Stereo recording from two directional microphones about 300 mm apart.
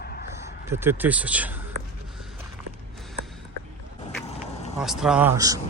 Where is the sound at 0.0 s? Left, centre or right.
Left.